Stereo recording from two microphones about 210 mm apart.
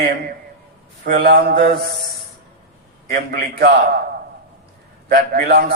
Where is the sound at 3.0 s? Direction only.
50° right (ahead or behind).